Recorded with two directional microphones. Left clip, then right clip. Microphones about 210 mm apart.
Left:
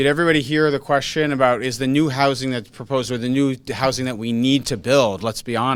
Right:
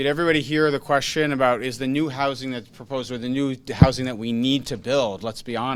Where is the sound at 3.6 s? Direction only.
15° left (ahead or behind).